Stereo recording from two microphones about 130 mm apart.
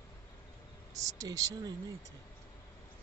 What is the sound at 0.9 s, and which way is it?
Speech, 25° right (ahead or behind).